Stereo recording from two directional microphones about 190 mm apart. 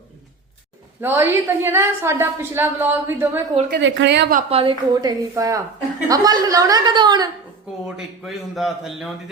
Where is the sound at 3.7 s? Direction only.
70° right (ahead or behind).